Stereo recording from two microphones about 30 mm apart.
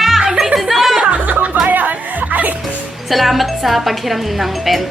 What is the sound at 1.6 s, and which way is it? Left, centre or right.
Music, right.